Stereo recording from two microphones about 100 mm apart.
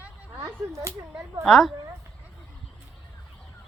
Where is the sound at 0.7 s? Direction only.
30° right (ahead or behind).